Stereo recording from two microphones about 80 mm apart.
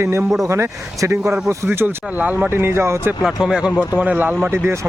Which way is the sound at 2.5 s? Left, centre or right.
Right.